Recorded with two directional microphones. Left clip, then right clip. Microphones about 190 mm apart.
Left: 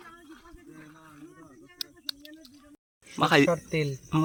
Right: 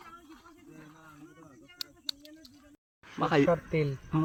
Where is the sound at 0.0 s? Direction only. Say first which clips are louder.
Left 2 dB; centre (ahead or behind).